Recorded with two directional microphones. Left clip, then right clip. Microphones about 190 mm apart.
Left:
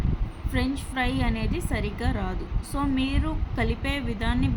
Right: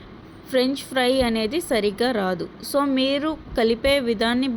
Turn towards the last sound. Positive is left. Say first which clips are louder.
# right 8 dB
turn(degrees=-25)  # may be behind; listen again after turning